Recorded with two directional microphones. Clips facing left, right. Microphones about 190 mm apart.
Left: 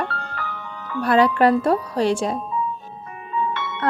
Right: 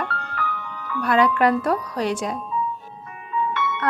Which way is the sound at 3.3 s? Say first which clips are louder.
Right 1 dB; 30° left (ahead or behind).